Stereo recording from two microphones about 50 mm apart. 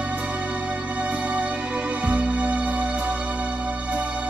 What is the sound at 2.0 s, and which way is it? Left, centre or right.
Music, right.